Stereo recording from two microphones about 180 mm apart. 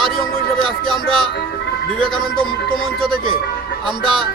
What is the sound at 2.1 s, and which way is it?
Speech, centre (ahead or behind).